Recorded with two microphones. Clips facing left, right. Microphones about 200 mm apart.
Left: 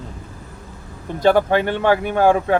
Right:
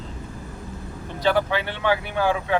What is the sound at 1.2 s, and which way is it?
Speech, 45° left (ahead or behind).